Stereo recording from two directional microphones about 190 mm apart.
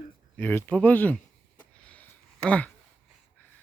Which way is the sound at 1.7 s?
5° left (ahead or behind).